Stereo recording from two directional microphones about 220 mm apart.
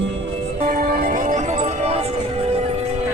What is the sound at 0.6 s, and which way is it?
Music, 40° right (ahead or behind).